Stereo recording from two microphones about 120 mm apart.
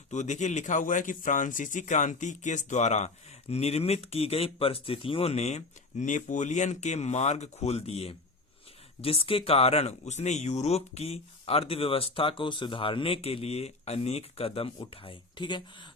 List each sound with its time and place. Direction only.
0.1 s speech: 80° left
3.5 s speech: 60° left (ahead or behind); by 15.9 s 40° left (ahead or behind)